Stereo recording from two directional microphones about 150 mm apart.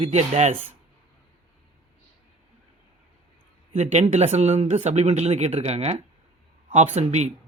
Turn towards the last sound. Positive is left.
turn(degrees=-50)  # may be behind; listen again after turning